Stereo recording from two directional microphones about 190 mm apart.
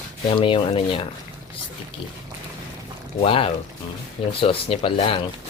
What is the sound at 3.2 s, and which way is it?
Speech, 30° left (ahead or behind).